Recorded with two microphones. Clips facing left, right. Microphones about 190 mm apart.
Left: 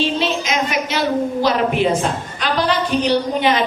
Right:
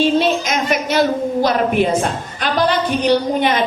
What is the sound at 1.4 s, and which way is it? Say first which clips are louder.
Speech: right 4 dB; 50° right (ahead or behind).